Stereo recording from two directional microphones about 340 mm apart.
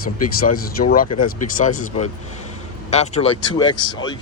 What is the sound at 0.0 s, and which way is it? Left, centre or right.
Speech, left.